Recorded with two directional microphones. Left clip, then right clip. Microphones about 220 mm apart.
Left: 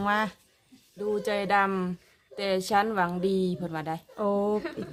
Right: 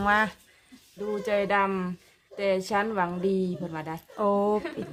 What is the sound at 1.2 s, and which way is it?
A woman's voice, 35° left (ahead or behind).